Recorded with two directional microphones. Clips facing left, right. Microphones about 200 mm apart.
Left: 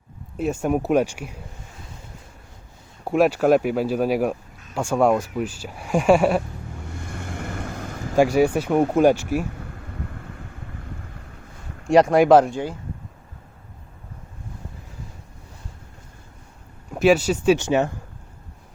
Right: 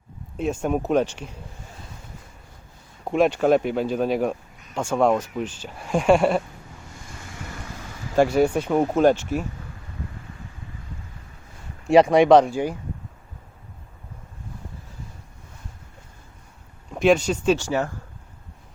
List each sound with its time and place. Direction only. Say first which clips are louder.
0.3 s speech: left 2 dB; 5° left (ahead or behind)
3.0 s speech: left 1 dB; 5° left (ahead or behind)
6.9 s vehicle: left 9 dB; 60° left (ahead or behind)
8.1 s speech: left 1 dB; 10° left (ahead or behind)
11.9 s speech: even; centre (ahead or behind)
16.9 s speech: left 1 dB; 5° left (ahead or behind)
17.6 s speech: left 4 dB; 20° left (ahead or behind)